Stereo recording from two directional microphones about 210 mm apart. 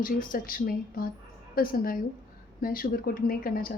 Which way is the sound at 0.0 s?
40° left (ahead or behind).